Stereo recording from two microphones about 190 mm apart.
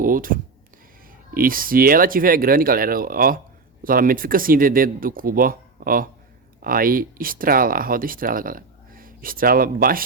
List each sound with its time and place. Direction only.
0.0 s speech: 45° right (ahead or behind)